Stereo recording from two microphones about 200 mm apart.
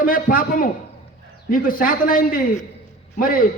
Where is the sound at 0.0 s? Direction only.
45° left (ahead or behind).